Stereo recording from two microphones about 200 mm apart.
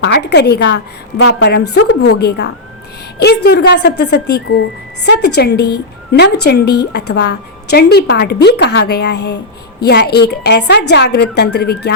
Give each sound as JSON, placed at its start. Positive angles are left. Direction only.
{"t": 0.0, "sound": "a woman's voice", "side_deg": 60}
{"t": 1.9, "sound": "a woman's voice", "side_deg": 55}